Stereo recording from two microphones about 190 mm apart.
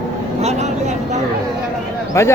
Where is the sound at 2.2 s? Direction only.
15° left (ahead or behind).